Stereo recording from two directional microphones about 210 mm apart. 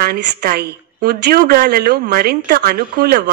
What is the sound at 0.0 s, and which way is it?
Speech, 50° right (ahead or behind).